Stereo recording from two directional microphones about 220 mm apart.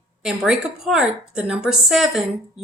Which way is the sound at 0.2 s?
Centre (ahead or behind).